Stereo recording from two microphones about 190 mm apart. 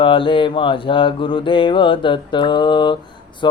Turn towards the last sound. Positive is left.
turn(degrees=25)  # may be behind; listen again after turning